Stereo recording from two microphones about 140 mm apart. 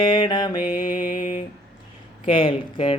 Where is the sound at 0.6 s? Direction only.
75° left (ahead or behind).